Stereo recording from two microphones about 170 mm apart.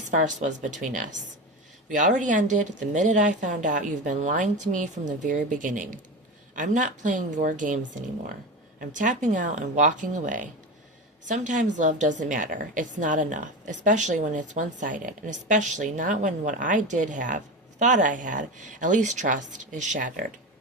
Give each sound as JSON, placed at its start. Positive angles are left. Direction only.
{"t": 0.1, "sound": "a woman's voice", "side_deg": -45}
{"t": 8.8, "sound": "a woman's voice", "side_deg": -50}